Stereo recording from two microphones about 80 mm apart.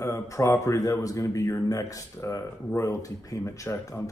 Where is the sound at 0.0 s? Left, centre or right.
Left.